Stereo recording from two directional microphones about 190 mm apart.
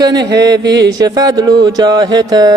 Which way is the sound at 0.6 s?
65° right (ahead or behind).